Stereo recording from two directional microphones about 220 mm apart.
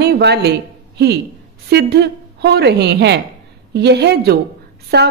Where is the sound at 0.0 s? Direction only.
50° right (ahead or behind).